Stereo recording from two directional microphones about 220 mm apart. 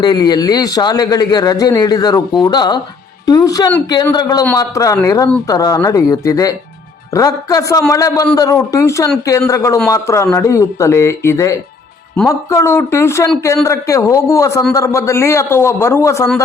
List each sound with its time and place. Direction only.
0.0 s a man's voice: 20° left (ahead or behind)